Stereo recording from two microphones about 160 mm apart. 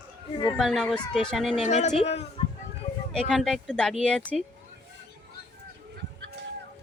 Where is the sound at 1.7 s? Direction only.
45° left (ahead or behind).